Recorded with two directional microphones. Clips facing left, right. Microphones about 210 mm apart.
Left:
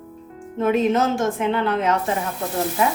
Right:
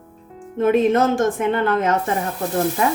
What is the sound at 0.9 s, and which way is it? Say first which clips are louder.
Speech: right 3 dB; 50° right (ahead or behind).